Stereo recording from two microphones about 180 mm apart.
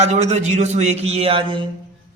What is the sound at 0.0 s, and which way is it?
A man's voice, 40° right (ahead or behind).